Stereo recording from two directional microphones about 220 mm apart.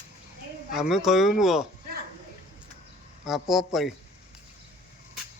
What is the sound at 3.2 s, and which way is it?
Speech, centre (ahead or behind).